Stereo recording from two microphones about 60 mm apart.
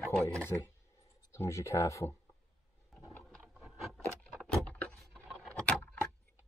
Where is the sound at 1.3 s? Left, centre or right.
Left.